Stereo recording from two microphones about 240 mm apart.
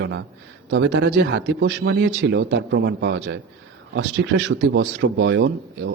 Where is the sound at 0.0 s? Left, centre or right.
Right.